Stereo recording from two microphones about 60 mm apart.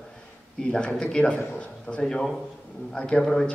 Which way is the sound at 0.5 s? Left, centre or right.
Centre.